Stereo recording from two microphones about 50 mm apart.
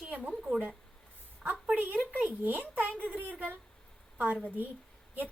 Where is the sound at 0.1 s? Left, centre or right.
Right.